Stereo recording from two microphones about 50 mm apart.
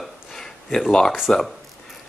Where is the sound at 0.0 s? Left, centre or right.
Centre.